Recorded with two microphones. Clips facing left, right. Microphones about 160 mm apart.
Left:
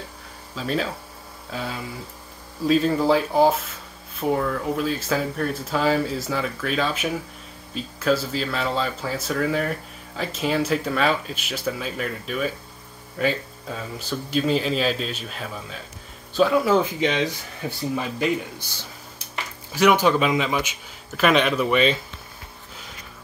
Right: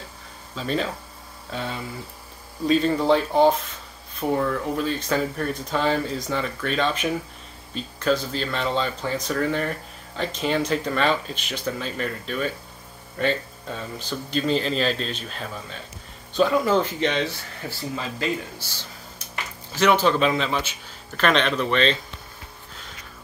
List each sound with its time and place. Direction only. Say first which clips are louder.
0.6 s a man's voice: even; centre (ahead or behind)